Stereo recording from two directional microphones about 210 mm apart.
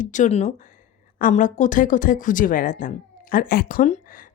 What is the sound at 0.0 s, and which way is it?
Speech, 35° left (ahead or behind).